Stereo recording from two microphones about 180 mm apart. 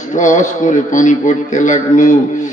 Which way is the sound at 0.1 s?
45° left (ahead or behind).